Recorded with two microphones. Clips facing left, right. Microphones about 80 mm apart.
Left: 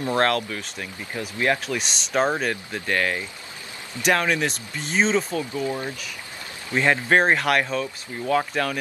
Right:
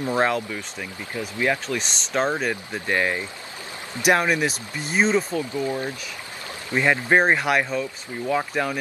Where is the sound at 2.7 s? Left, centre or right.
Centre.